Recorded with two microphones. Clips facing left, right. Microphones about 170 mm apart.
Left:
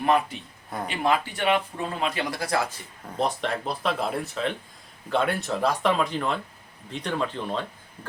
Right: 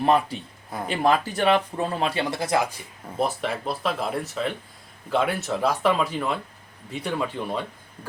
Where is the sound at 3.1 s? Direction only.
5° right (ahead or behind).